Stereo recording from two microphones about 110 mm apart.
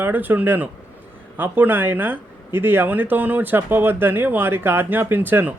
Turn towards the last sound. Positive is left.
turn(degrees=-15)  # may be behind; listen again after turning